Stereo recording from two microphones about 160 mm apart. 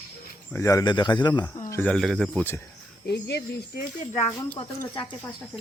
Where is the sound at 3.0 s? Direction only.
90° left.